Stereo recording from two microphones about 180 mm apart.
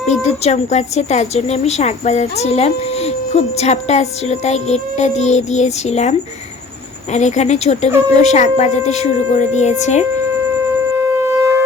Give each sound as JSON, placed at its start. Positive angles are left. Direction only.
{"t": 0.1, "sound": "a woman's voice", "side_deg": 40}
{"t": 10.9, "sound": "shofar", "side_deg": -15}